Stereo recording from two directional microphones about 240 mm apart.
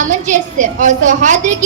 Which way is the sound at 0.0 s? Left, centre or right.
Right.